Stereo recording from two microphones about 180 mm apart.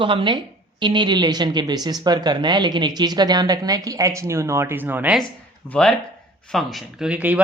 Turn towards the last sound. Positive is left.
turn(degrees=-10)  # may be behind; listen again after turning